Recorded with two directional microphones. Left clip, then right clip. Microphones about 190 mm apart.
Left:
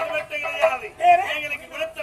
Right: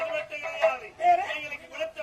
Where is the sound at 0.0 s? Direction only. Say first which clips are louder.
Left 5 dB; 25° right (ahead or behind).